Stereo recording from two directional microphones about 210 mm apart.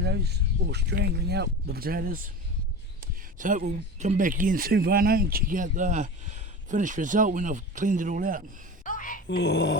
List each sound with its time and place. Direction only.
0.0 s speech: 55° right (ahead or behind)
8.8 s a sound: 40° left (ahead or behind)
9.2 s groan: 55° left (ahead or behind)